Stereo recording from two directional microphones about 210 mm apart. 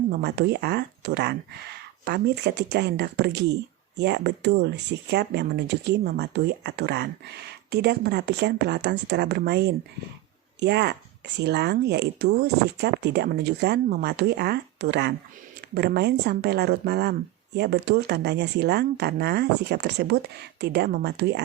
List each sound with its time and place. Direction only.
0.1 s speech: 50° right (ahead or behind)